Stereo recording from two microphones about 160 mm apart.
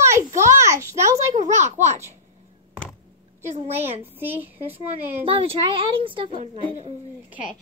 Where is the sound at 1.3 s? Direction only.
45° right (ahead or behind).